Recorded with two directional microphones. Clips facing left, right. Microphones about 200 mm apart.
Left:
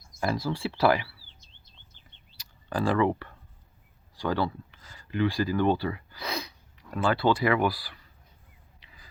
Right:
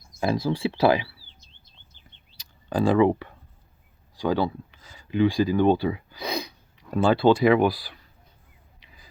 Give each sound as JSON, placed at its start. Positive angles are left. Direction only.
{"t": 0.2, "sound": "speech", "side_deg": -20}
{"t": 2.4, "sound": "speech", "side_deg": -20}
{"t": 6.9, "sound": "speech", "side_deg": -25}